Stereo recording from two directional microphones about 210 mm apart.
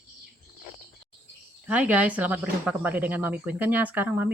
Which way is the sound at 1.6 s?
5° right (ahead or behind).